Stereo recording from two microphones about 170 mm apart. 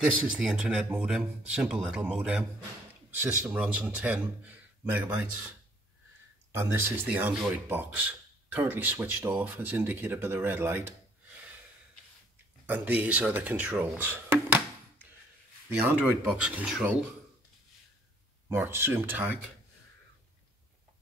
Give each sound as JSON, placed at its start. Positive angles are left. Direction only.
{"t": 0.0, "sound": "speech", "side_deg": -5}
{"t": 12.6, "sound": "speech", "side_deg": -10}
{"t": 18.5, "sound": "speech", "side_deg": -15}